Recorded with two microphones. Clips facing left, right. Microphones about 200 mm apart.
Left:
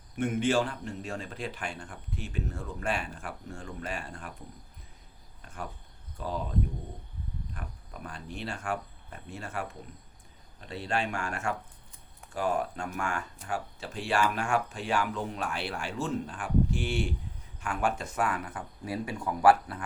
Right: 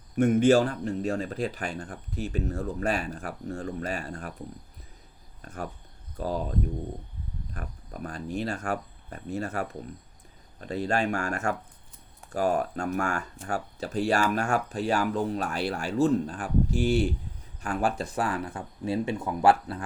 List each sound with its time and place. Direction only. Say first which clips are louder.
0.2 s speech: right 7 dB; 40° right (ahead or behind)
6.1 s speech: right 5 dB; 40° right (ahead or behind)
7.5 s speech: right 4 dB; 40° right (ahead or behind); by 19.8 s 25° right (ahead or behind)